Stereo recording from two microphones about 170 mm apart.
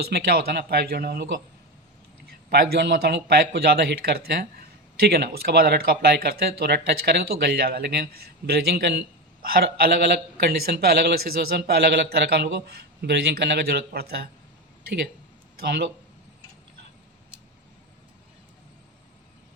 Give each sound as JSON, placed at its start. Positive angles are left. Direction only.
{"t": 0.1, "sound": "speech", "side_deg": -70}
{"t": 2.5, "sound": "speech", "side_deg": -70}
{"t": 9.5, "sound": "speech", "side_deg": -65}